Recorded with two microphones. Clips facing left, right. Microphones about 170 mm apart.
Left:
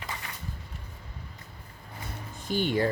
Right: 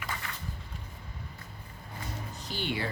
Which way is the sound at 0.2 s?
15° left (ahead or behind).